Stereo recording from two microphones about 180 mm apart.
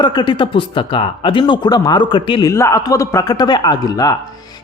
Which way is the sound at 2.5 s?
15° left (ahead or behind).